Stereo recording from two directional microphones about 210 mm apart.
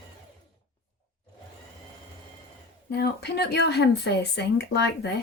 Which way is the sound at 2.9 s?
50° left (ahead or behind).